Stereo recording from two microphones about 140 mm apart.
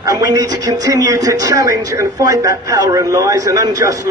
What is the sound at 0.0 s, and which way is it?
Speech, 25° right (ahead or behind).